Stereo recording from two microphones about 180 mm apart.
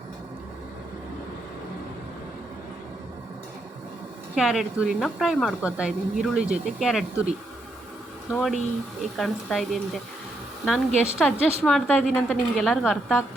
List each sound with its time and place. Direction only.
4.4 s a woman's voice: 5° right (ahead or behind)